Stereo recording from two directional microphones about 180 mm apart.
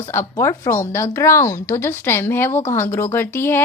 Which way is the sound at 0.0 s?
15° left (ahead or behind).